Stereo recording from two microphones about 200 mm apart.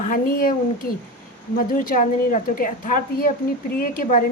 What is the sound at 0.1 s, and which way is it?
Speech, 45° left (ahead or behind).